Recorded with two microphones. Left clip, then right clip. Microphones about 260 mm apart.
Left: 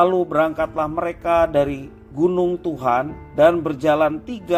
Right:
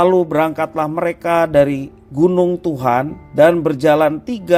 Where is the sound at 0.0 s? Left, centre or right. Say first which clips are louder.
Right 3 dB; right.